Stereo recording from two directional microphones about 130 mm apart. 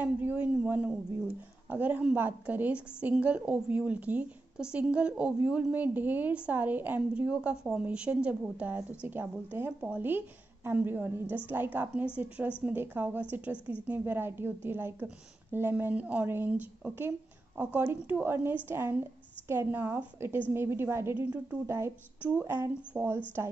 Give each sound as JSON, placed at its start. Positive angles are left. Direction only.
{"t": 0.0, "sound": "a woman's voice", "side_deg": -15}
{"t": 17.7, "sound": "a woman's voice", "side_deg": -15}